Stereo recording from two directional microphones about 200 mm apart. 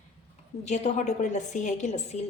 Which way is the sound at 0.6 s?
35° left (ahead or behind).